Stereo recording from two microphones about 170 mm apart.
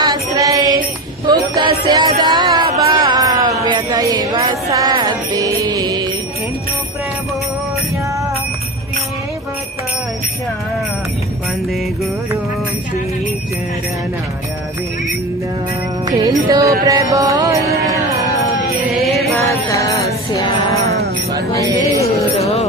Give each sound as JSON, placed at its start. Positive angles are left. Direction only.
{"t": 0.0, "sound": "music", "side_deg": -20}
{"t": 16.0, "sound": "music", "side_deg": -20}
{"t": 19.4, "sound": "music", "side_deg": 20}
{"t": 21.6, "sound": "music", "side_deg": -20}
{"t": 22.4, "sound": "music", "side_deg": 40}